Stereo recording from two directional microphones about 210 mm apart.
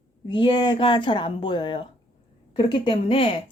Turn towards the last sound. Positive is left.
turn(degrees=25)  # may be behind; listen again after turning